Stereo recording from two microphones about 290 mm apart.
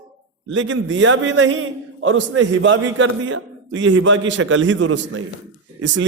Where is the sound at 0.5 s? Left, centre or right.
Right.